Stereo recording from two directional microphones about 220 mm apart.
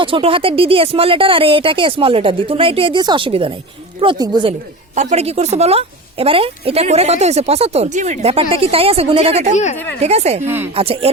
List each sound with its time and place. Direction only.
0.0 s a woman's voice: 25° right (ahead or behind)
4.9 s a woman's voice: 30° right (ahead or behind)
9.7 s speech: 10° left (ahead or behind)
10.0 s a woman's voice: 30° right (ahead or behind)
10.4 s speech: 10° right (ahead or behind)
10.8 s a woman's voice: 25° right (ahead or behind)